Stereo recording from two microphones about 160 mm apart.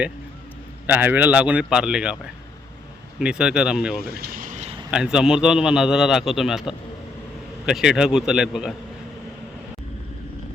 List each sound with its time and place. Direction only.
0.9 s speech: 10° right (ahead or behind)
3.2 s a man's voice: 5° right (ahead or behind)
4.0 s vehicle: 75° right (ahead or behind); by 4.7 s 50° right (ahead or behind)
4.9 s a man's voice: 5° right (ahead or behind)